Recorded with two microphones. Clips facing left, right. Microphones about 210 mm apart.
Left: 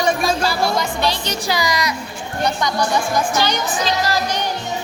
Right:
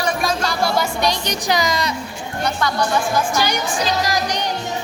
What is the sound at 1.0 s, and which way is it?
Speech, 15° right (ahead or behind).